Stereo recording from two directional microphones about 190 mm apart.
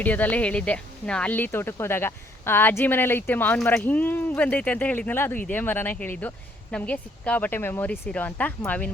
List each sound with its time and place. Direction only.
0.0 s speech: 10° left (ahead or behind)